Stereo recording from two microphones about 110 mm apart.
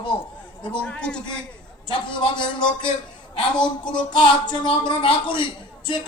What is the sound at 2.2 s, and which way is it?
A woman's voice, 45° left (ahead or behind).